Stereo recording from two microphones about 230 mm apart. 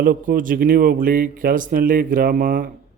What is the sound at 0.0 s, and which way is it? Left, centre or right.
Speech, right.